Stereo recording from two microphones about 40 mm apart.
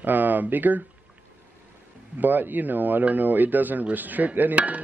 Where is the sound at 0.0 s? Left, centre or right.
Right.